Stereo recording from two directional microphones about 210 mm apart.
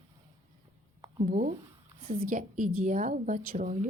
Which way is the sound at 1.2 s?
40° right (ahead or behind).